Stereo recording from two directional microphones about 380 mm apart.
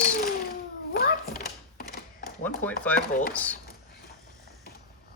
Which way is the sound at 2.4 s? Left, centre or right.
Centre.